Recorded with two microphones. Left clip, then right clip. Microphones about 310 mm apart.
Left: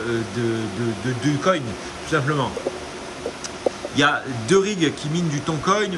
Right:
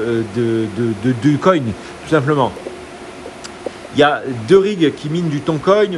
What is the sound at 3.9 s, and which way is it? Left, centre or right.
A man's voice, centre.